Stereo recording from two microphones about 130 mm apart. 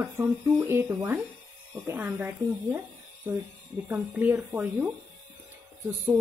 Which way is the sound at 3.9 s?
15° right (ahead or behind).